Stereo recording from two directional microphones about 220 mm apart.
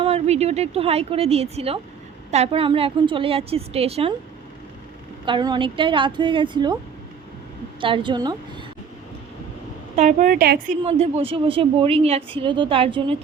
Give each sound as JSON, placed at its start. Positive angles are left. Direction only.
{"t": 0.0, "sound": "speech", "side_deg": -25}
{"t": 5.2, "sound": "speech", "side_deg": -20}
{"t": 7.8, "sound": "speech", "side_deg": -25}
{"t": 9.9, "sound": "a woman's voice", "side_deg": -35}
{"t": 10.8, "sound": "speech", "side_deg": -30}